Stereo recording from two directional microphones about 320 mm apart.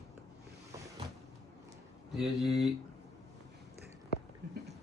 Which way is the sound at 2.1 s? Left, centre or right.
Centre.